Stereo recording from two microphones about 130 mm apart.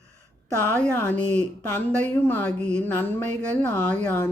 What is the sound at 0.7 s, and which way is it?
Speech, 15° left (ahead or behind).